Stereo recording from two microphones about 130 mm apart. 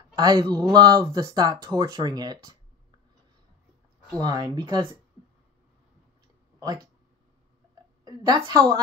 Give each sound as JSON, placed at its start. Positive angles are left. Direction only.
{"t": 0.1, "sound": "speech", "side_deg": -30}
{"t": 4.2, "sound": "speech", "side_deg": -35}
{"t": 6.6, "sound": "speech", "side_deg": -30}
{"t": 8.0, "sound": "a woman's voice", "side_deg": -30}